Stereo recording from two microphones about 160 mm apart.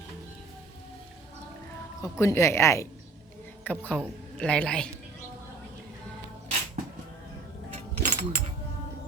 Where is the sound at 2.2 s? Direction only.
20° left (ahead or behind).